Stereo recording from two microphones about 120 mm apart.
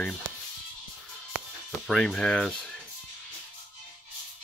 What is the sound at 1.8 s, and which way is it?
Speech, 5° left (ahead or behind).